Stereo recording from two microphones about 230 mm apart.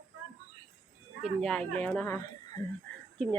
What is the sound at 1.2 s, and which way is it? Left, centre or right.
A woman's voice, centre.